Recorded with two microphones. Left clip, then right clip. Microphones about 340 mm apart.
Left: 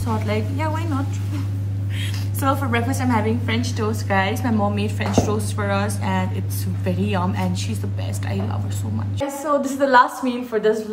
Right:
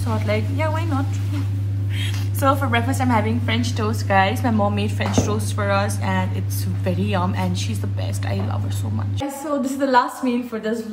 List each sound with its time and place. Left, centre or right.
0.0 s a woman's voice: centre
2.0 s a woman's voice: centre
9.8 s a woman's voice: centre